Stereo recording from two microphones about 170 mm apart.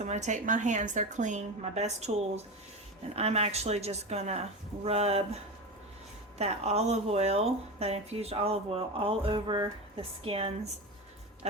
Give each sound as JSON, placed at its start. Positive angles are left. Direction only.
{"t": 0.0, "sound": "a woman's voice", "side_deg": -45}
{"t": 6.4, "sound": "speech", "side_deg": -40}